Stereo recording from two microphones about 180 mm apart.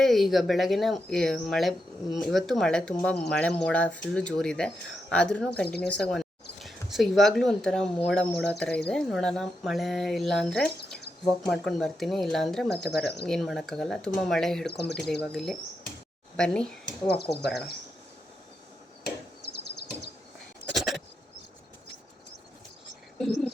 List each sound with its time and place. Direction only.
0.0 s speech: centre (ahead or behind)
14.7 s speech: 65° left (ahead or behind)
15.2 s speech: centre (ahead or behind)
16.8 s speech: 65° left (ahead or behind)
20.7 s a sound: centre (ahead or behind)
23.1 s a sound: 5° left (ahead or behind)